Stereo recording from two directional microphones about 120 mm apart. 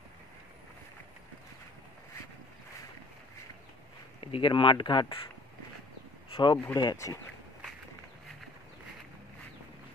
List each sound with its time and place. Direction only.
4.2 s speech: 45° left (ahead or behind)
6.3 s speech: 40° left (ahead or behind)